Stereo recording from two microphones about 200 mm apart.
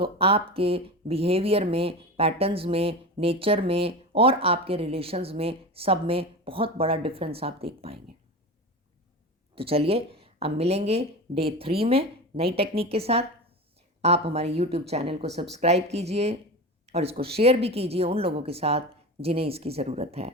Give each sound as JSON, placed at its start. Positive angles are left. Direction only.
{"t": 0.0, "sound": "speech", "side_deg": -30}
{"t": 9.6, "sound": "speech", "side_deg": -30}